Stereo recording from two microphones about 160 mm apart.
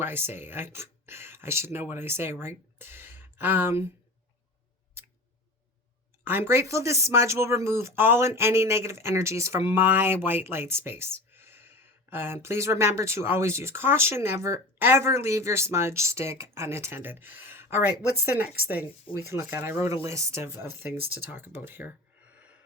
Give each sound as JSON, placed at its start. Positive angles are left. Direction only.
{"t": 0.0, "sound": "speech", "side_deg": -15}
{"t": 6.2, "sound": "speech", "side_deg": -15}